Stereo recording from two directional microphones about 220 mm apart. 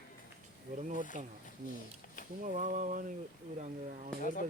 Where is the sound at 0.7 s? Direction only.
35° right (ahead or behind).